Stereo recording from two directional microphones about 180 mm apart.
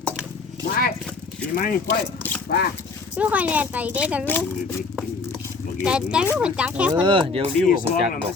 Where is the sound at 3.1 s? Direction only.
10° right (ahead or behind).